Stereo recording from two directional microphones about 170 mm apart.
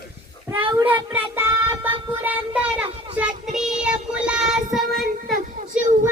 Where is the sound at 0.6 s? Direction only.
25° right (ahead or behind); by 5.4 s centre (ahead or behind).